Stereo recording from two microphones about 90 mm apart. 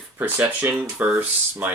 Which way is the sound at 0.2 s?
20° right (ahead or behind).